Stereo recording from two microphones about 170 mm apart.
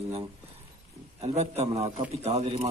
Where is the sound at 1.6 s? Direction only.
20° right (ahead or behind).